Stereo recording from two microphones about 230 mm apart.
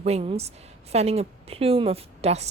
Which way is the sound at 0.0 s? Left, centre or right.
Right.